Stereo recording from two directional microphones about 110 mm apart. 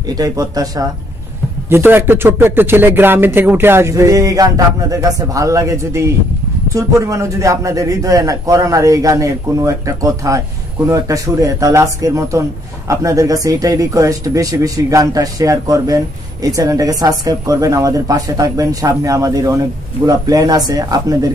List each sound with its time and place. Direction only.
0.0 s a man's voice: 35° right (ahead or behind)
1.7 s a man's voice: 20° right (ahead or behind); by 21.3 s 35° right (ahead or behind)